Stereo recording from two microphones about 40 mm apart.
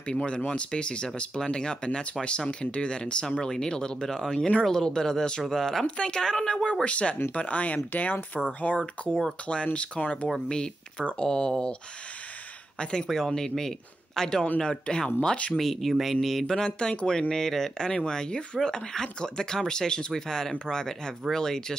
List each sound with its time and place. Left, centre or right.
0.1 s speech: left
5.9 s speech: left
13.1 s speech: centre
15.5 s speech: centre
16.9 s speech: left
17.3 s speech: centre